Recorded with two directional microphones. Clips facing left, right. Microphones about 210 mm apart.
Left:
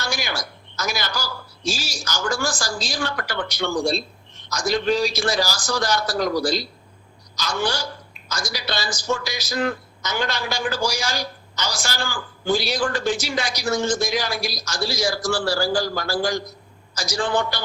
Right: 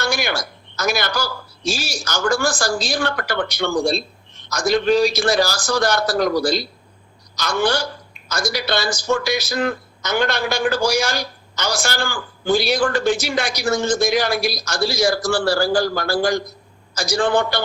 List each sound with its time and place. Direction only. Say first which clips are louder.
0.0 s a man's voice: right 6 dB; 60° right (ahead or behind)